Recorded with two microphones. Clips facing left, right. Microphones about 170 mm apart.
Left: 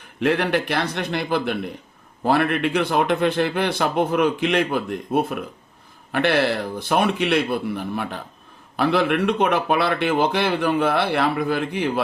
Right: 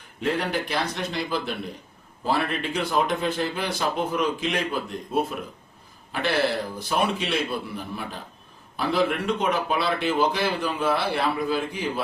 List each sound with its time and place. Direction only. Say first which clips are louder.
0.2 s a man's voice: left 6 dB; 70° left (ahead or behind)